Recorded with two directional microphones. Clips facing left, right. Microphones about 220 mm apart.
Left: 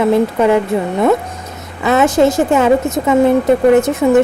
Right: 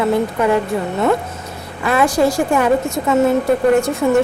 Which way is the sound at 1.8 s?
25° left (ahead or behind).